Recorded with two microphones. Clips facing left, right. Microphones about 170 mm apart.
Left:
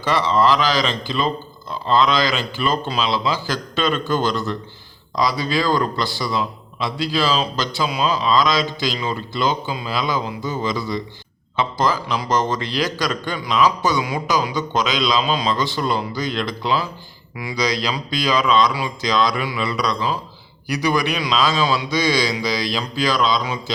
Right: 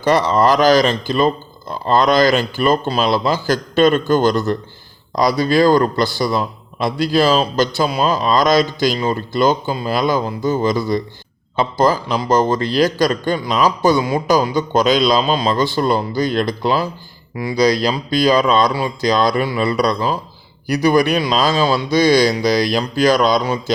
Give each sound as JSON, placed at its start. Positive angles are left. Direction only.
{"t": 0.0, "sound": "a man's voice", "side_deg": -45}
{"t": 17.3, "sound": "a man's voice", "side_deg": -35}
{"t": 17.6, "sound": "a man's voice", "side_deg": -55}
{"t": 19.5, "sound": "a man's voice", "side_deg": -35}
{"t": 20.7, "sound": "a man's voice", "side_deg": -55}
{"t": 21.8, "sound": "a man's voice", "side_deg": -55}